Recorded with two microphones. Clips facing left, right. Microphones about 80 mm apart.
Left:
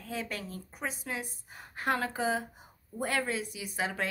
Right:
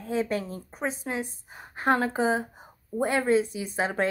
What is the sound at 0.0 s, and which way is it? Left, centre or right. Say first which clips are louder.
A woman's voice: right 10 dB; right.